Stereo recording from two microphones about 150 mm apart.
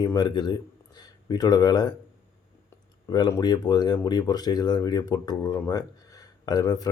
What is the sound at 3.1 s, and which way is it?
Speech, 25° left (ahead or behind).